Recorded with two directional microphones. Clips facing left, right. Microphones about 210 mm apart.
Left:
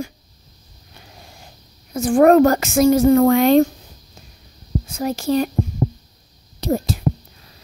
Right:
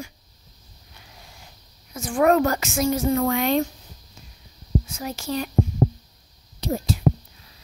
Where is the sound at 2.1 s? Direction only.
50° left (ahead or behind).